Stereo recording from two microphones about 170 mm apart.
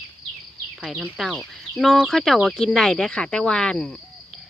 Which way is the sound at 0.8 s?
Centre (ahead or behind).